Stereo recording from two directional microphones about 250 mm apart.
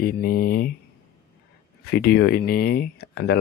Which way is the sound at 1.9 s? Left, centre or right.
Left.